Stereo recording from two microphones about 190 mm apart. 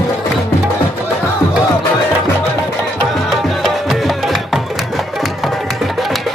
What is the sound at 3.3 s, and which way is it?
Music, centre (ahead or behind).